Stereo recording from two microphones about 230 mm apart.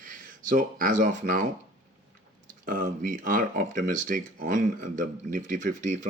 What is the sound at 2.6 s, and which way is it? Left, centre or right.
Speech, right.